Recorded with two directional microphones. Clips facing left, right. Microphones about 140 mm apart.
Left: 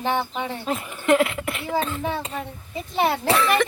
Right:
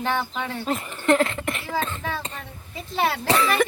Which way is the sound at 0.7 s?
5° left (ahead or behind).